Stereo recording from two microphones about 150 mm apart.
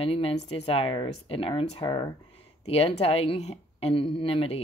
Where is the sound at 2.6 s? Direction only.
40° left (ahead or behind).